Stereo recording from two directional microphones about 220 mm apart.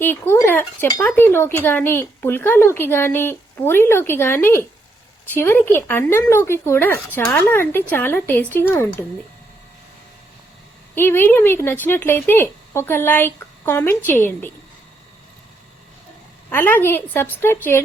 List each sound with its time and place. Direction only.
0.0 s speech: 10° left (ahead or behind)
10.9 s speech: 10° left (ahead or behind)
16.5 s speech: 10° left (ahead or behind)